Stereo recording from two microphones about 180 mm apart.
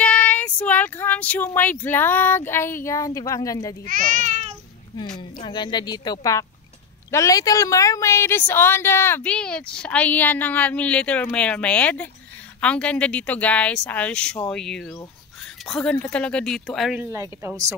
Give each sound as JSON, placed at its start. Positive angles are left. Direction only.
{"t": 0.0, "sound": "a woman's voice", "side_deg": 10}
{"t": 3.8, "sound": "speech", "side_deg": -45}
{"t": 4.9, "sound": "a woman's voice", "side_deg": 25}
{"t": 17.0, "sound": "speech", "side_deg": -15}